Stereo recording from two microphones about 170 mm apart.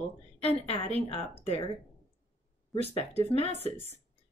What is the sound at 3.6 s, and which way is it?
Speech, 40° right (ahead or behind).